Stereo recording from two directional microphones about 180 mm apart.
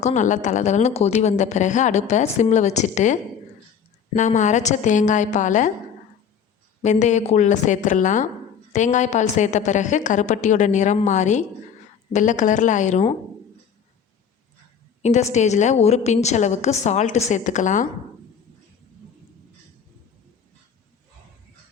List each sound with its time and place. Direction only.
0.0 s a woman's voice: 40° left (ahead or behind)
6.8 s a woman's voice: 40° left (ahead or behind)
15.0 s a woman's voice: 40° left (ahead or behind)